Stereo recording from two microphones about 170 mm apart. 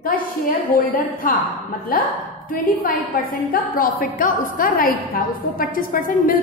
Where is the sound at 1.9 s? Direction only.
55° left (ahead or behind).